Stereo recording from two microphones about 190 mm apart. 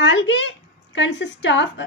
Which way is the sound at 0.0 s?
70° left (ahead or behind).